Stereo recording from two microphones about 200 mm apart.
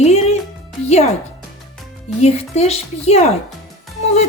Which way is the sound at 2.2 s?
30° left (ahead or behind).